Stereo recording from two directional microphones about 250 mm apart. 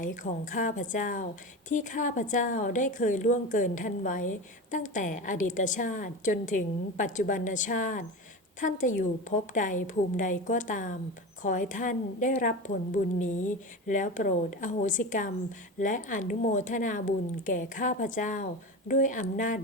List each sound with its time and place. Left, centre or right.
0.0 s a woman's voice: left